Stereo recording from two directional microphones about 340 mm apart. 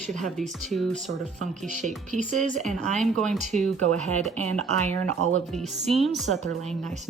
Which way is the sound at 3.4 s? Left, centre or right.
Centre.